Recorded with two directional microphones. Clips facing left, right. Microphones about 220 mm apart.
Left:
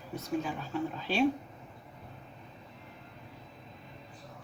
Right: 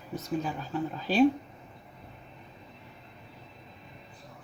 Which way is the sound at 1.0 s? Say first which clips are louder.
Right 7 dB; 40° right (ahead or behind).